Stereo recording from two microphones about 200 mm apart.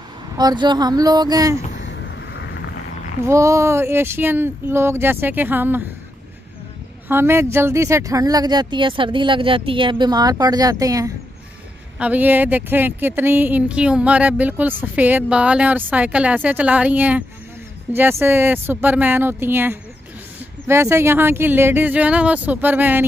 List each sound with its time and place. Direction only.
0.4 s speech: 20° right (ahead or behind)
1.9 s vehicle: 65° left (ahead or behind)
3.3 s speech: 15° right (ahead or behind)
7.1 s speech: 10° right (ahead or behind)